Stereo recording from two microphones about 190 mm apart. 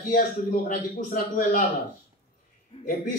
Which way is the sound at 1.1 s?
50° left (ahead or behind).